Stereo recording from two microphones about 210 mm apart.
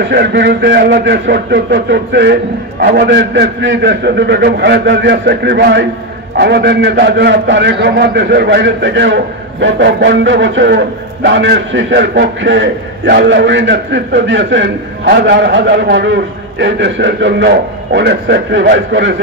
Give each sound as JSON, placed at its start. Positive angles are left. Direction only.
{"t": 0.1, "sound": "a man's voice", "side_deg": -55}